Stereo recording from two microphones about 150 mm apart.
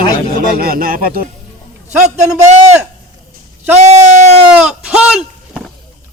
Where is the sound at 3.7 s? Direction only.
50° right (ahead or behind).